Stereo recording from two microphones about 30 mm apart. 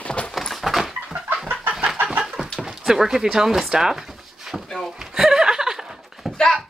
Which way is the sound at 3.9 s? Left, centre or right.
Centre.